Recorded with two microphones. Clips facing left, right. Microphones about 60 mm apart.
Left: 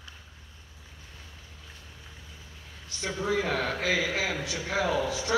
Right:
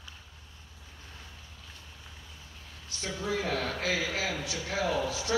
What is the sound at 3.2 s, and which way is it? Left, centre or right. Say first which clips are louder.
A man's voice: left 3 dB; left.